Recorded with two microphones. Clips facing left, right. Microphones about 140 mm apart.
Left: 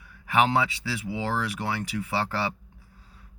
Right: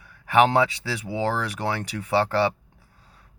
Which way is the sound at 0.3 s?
40° right (ahead or behind).